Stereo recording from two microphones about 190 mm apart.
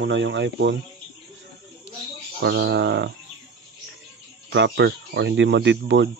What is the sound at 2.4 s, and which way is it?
Speech, 60° right (ahead or behind).